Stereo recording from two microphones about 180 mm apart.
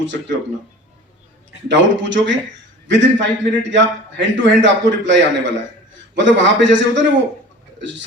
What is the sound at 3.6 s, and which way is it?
A man's voice, 90° right.